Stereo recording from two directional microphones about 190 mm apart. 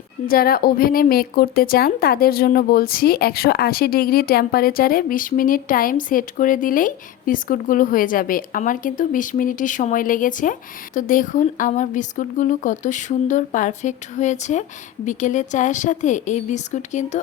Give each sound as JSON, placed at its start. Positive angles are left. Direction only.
{"t": 0.3, "sound": "a woman's voice", "side_deg": 50}